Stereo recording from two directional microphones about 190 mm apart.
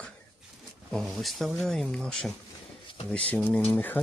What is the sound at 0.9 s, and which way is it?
Speech, centre (ahead or behind).